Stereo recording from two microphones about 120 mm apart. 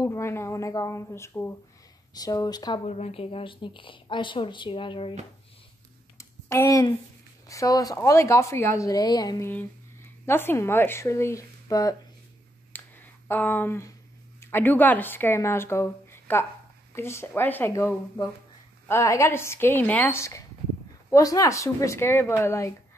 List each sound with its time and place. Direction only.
0.0 s speech: 25° left (ahead or behind)
2.1 s speech: 30° left (ahead or behind)
2.8 s a woman's voice: 65° left (ahead or behind); by 5.1 s 45° left (ahead or behind)
6.1 s a sound: 25° left (ahead or behind)
7.4 s speech: 25° left (ahead or behind)
9.4 s speech: 15° left (ahead or behind)
12.7 s a sound: 15° left (ahead or behind)
14.4 s speech: 15° left (ahead or behind)